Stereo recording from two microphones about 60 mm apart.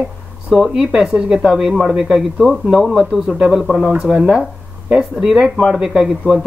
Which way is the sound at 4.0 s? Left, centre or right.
Centre.